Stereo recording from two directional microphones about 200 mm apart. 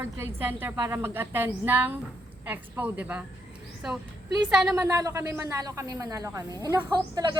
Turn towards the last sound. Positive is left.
turn(degrees=-15)  # may be behind; listen again after turning